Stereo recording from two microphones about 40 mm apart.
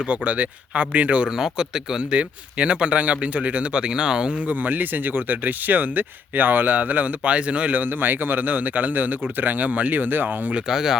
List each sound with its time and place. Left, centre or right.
0.1 s speech: right
1.4 s a man's voice: centre
2.0 s speech: right
4.4 s speech: right
7.8 s speech: right
10.7 s a man's voice: centre